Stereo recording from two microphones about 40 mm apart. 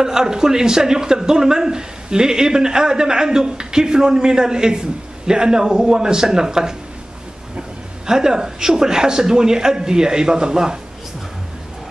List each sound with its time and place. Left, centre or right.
0.0 s speech: centre
8.1 s speech: centre